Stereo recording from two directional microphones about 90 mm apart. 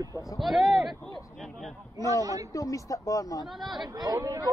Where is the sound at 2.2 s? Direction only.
40° right (ahead or behind).